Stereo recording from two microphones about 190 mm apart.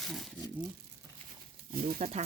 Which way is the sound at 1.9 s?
35° right (ahead or behind).